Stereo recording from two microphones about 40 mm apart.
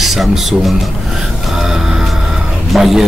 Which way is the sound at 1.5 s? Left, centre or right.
Centre.